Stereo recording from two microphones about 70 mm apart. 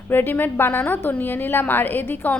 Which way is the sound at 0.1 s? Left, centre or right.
Left.